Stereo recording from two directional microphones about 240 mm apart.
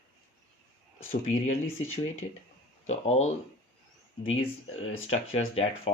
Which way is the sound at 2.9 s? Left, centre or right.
Left.